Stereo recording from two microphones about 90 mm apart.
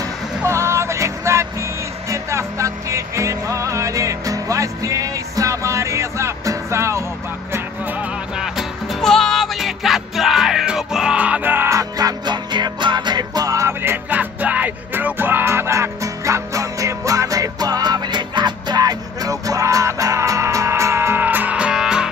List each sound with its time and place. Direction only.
0.4 s music: 30° right (ahead or behind)
9.0 s music: 5° left (ahead or behind); by 11.7 s 20° right (ahead or behind)
11.7 s music: 50° right (ahead or behind); by 13.9 s 35° right (ahead or behind)
14.1 s music: 15° right (ahead or behind)